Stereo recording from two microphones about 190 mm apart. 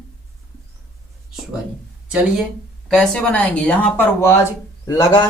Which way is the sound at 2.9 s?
5° left (ahead or behind).